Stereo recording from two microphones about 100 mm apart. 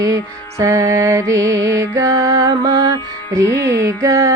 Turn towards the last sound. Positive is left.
turn(degrees=-30)  # may be behind; listen again after turning